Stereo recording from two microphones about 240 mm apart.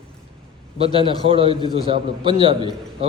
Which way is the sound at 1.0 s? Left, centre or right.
Right.